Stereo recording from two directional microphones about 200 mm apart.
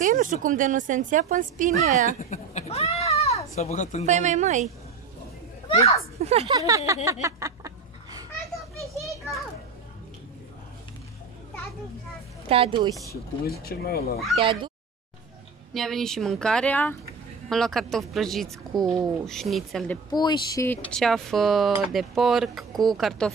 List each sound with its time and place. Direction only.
0.0 s a woman's voice: 40° right (ahead or behind)
2.2 s a sound: 35° left (ahead or behind)
4.0 s a woman's voice: 35° right (ahead or behind)
5.7 s a child's voice: 30° left (ahead or behind)
6.1 s a woman's voice: 30° right (ahead or behind)
6.5 s a sound: 15° right (ahead or behind)
12.4 s a woman's voice: 25° right (ahead or behind)
13.5 s speech: 50° left (ahead or behind)
14.1 s speech: centre (ahead or behind)
14.4 s a woman's voice: 25° right (ahead or behind)
15.7 s speech: centre (ahead or behind)
20.1 s speech: 20° left (ahead or behind); by 23.3 s centre (ahead or behind)